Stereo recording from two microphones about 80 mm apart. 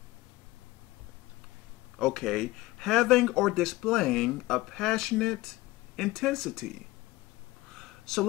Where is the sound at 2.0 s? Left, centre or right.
Centre.